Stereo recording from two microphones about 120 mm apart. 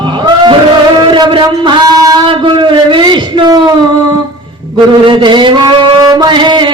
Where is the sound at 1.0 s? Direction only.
40° right (ahead or behind).